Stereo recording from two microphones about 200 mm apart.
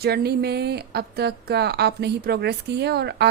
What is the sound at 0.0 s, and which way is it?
A woman's voice, 50° right (ahead or behind).